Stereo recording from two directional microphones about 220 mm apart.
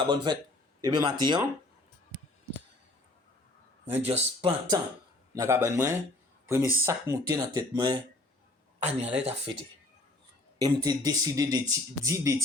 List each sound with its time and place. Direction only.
0.3 s speech: 20° right (ahead or behind)
3.8 s speech: 30° right (ahead or behind)
5.3 s a man's voice: 15° right (ahead or behind)
8.8 s speech: 30° right (ahead or behind)
10.6 s a man's voice: 15° right (ahead or behind)